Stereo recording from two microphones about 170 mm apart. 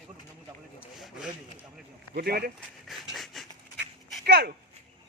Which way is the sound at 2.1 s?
65° right (ahead or behind).